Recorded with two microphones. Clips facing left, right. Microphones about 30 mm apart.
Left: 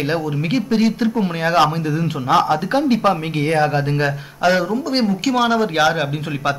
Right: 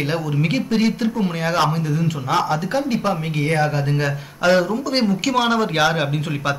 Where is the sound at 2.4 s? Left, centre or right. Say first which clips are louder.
Left 3 dB; left.